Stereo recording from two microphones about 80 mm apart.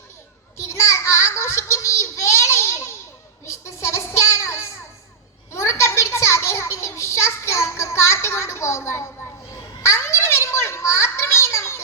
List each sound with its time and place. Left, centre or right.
0.5 s child singing: left
3.4 s a sound: left
9.8 s children playing: left